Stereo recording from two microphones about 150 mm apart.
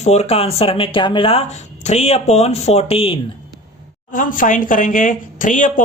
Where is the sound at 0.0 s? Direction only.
50° left (ahead or behind).